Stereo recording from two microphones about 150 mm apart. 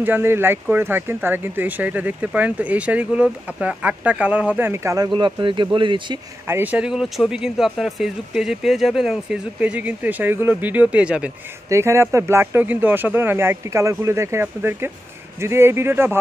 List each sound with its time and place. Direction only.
0.0 s speech: 15° right (ahead or behind); by 6.1 s 35° right (ahead or behind)
6.4 s speech: 15° right (ahead or behind)
11.7 s speech: 20° right (ahead or behind)